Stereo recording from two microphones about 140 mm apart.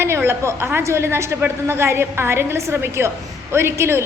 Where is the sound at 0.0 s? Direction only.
15° right (ahead or behind).